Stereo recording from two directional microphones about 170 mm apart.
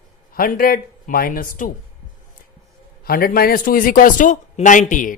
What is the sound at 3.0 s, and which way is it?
Speech, 60° left (ahead or behind).